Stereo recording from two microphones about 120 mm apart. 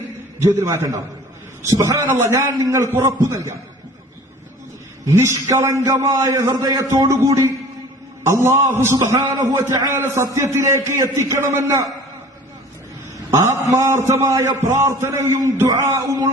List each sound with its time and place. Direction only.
0.4 s a man's voice: 20° right (ahead or behind)
5.0 s a man's voice: 20° right (ahead or behind)
13.3 s a man's voice: 25° right (ahead or behind)